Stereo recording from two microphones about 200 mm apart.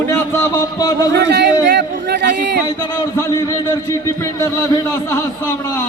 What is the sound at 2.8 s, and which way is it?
A man's voice, 20° left (ahead or behind).